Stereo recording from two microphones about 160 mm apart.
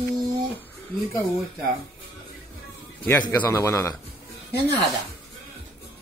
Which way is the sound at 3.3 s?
20° left (ahead or behind).